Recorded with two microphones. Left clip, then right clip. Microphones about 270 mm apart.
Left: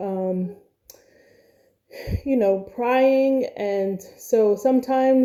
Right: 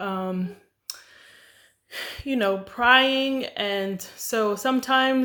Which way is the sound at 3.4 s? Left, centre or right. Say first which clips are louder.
Left 3 dB; right.